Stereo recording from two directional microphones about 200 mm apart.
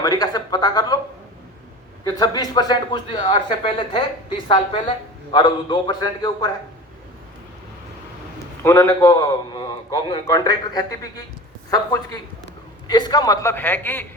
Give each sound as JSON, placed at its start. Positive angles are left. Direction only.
{"t": 0.0, "sound": "speech", "side_deg": 20}
{"t": 2.0, "sound": "speech", "side_deg": 20}
{"t": 8.6, "sound": "speech", "side_deg": 15}
{"t": 12.9, "sound": "a man's voice", "side_deg": 20}